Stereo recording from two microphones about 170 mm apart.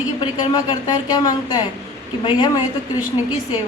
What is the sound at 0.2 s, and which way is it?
A woman's voice, 25° left (ahead or behind).